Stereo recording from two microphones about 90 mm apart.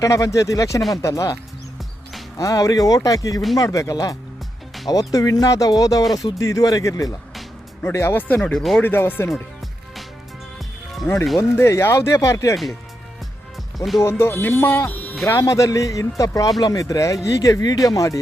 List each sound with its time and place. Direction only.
0.0 s speech: 35° left (ahead or behind)
2.4 s speech: 40° left (ahead or behind)
6.0 s speech: centre (ahead or behind)
6.2 s speech: 40° left (ahead or behind)
7.9 s speech: 25° left (ahead or behind)
8.5 s speech: centre (ahead or behind)
8.8 s speech: 25° left (ahead or behind)
11.1 s speech: 30° left (ahead or behind)
13.7 s speech: centre (ahead or behind)
14.0 s speech: 30° left (ahead or behind)
15.4 s speech: 35° left (ahead or behind)